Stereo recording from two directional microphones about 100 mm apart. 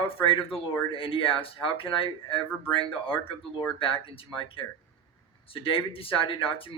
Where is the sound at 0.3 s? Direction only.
65° left (ahead or behind).